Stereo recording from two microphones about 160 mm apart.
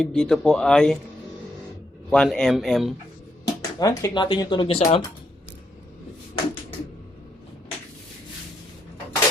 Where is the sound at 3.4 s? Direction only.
20° left (ahead or behind).